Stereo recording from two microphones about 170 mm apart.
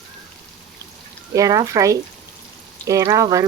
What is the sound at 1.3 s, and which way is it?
Speech, 20° right (ahead or behind).